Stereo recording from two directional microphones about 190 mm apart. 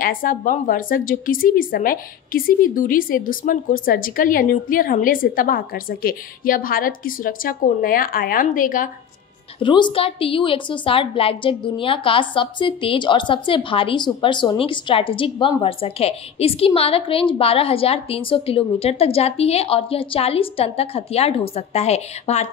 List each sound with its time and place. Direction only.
0.0 s a woman's voice: 50° left (ahead or behind)
9.6 s a woman's voice: 25° left (ahead or behind)